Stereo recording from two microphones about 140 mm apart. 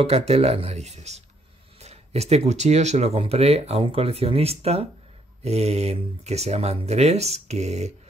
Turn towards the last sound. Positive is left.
turn(degrees=-50)  # may be behind; listen again after turning